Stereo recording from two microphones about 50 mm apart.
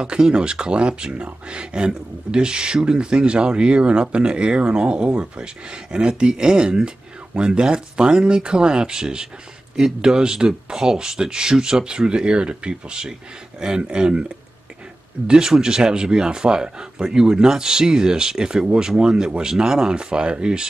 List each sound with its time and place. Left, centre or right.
0.0 s speech: right
15.2 s speech: centre